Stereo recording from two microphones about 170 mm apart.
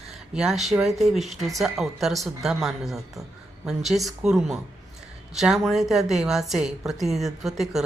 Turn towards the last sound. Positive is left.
turn(degrees=0)  # may be behind; listen again after turning